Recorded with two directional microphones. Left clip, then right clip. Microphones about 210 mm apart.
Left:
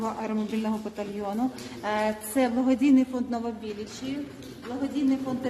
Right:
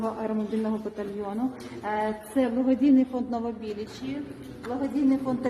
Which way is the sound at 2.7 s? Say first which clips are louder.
Right 2 dB; 10° left (ahead or behind).